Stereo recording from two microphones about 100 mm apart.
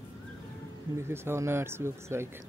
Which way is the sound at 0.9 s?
25° right (ahead or behind).